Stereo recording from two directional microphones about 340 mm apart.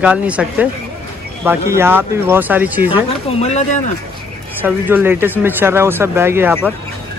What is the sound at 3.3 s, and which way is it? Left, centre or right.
Speech, centre.